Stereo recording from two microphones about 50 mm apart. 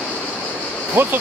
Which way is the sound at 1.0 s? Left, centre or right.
Right.